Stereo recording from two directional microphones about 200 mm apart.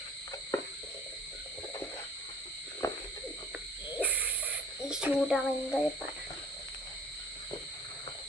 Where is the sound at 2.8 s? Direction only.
15° left (ahead or behind).